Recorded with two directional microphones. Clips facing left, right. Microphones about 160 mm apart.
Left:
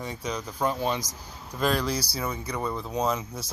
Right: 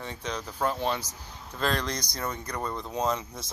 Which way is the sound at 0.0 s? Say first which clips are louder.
Left 2 dB; 10° left (ahead or behind).